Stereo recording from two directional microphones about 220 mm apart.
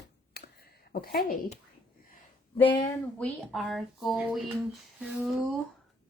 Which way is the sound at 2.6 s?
20° left (ahead or behind).